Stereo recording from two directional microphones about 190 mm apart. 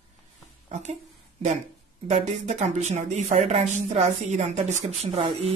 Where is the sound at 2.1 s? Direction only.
35° right (ahead or behind).